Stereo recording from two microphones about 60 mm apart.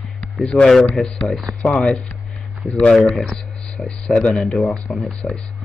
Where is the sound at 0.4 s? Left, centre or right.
Centre.